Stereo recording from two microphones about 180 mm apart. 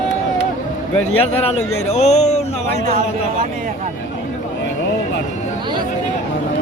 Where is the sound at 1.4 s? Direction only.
35° left (ahead or behind).